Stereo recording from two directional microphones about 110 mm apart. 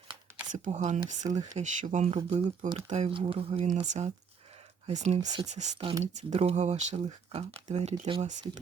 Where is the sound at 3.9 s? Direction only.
90° right.